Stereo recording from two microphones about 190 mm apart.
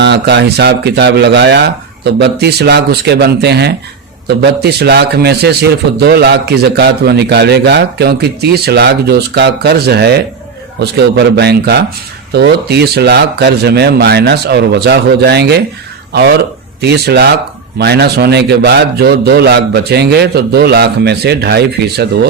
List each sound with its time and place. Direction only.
0.0 s a man's voice: 65° right (ahead or behind)
16.8 s a man's voice: 60° right (ahead or behind)